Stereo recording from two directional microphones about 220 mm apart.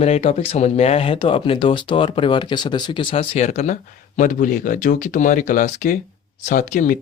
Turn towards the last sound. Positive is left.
turn(degrees=35)  # may be behind; listen again after turning